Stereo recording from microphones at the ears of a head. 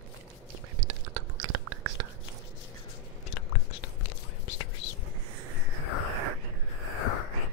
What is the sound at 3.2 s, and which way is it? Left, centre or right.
Whispering, left.